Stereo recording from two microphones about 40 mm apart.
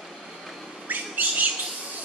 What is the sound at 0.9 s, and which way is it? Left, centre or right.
Bird, right.